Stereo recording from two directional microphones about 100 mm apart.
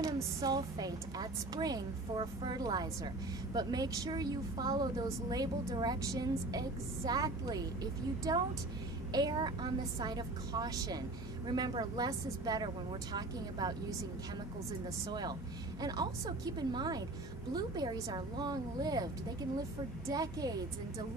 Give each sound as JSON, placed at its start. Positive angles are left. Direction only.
{"t": 0.0, "sound": "a woman's voice", "side_deg": -40}
{"t": 15.0, "sound": "a woman's voice", "side_deg": -45}
{"t": 20.1, "sound": "a woman's voice", "side_deg": -40}